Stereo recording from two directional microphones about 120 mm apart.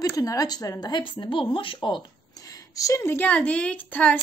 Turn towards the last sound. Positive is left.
turn(degrees=15)  # may be behind; listen again after turning